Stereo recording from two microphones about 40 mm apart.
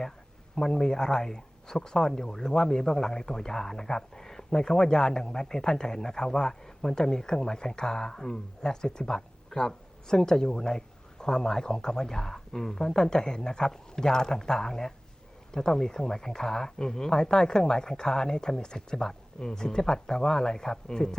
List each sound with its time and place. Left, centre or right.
0.5 s speech: centre